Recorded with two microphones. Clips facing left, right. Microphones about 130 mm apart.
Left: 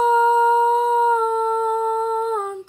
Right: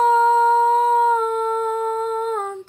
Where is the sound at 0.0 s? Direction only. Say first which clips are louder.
Right 1 dB; 10° left (ahead or behind).